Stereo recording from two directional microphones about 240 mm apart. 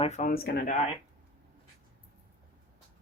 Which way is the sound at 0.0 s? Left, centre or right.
Left.